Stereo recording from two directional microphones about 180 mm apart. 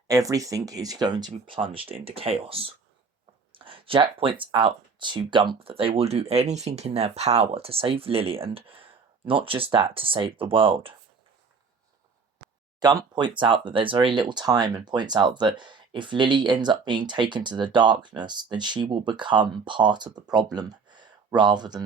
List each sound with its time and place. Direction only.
0.1 s speech: 20° right (ahead or behind)
12.8 s speech: 20° right (ahead or behind)